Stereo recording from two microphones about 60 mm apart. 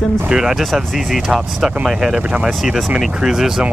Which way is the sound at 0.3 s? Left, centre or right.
Centre.